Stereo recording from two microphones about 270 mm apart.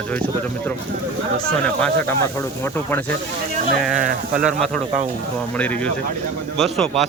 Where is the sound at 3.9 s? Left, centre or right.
Right.